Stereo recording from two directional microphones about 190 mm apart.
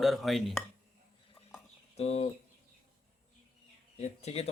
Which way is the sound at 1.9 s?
35° left (ahead or behind).